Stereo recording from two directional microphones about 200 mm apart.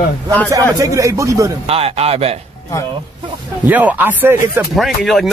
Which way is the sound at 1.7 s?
30° right (ahead or behind).